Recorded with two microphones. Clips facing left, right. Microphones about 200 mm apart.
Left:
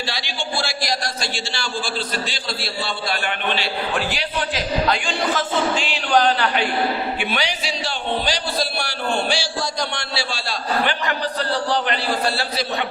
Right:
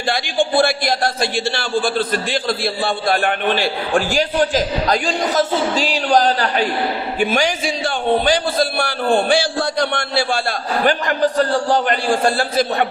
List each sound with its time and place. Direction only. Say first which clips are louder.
0.1 s a man's voice: right 9 dB; 55° right (ahead or behind)